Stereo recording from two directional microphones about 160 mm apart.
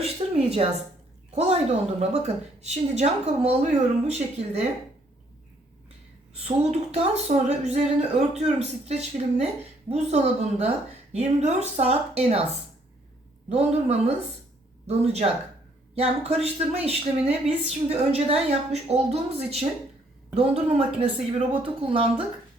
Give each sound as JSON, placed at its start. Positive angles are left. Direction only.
{"t": 0.0, "sound": "a sound", "side_deg": -40}
{"t": 2.0, "sound": "a woman's voice", "side_deg": -45}
{"t": 6.4, "sound": "a woman's voice", "side_deg": -40}
{"t": 13.5, "sound": "a woman's voice", "side_deg": -40}